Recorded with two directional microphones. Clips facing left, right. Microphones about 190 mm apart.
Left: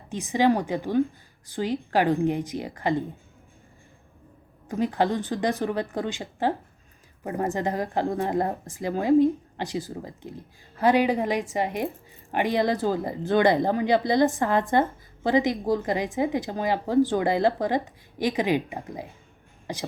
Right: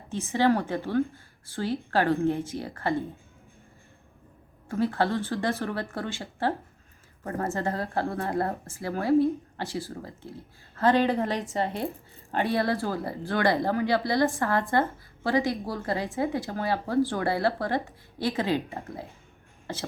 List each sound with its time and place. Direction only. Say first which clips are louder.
0.1 s a woman's voice: left 2 dB; 15° left (ahead or behind)
4.7 s a woman's voice: left 2 dB; 15° left (ahead or behind)